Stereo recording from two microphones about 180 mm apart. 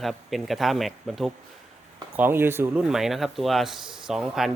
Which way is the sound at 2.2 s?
10° right (ahead or behind).